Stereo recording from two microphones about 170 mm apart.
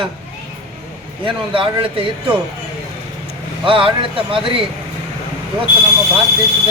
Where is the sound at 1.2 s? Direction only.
30° right (ahead or behind).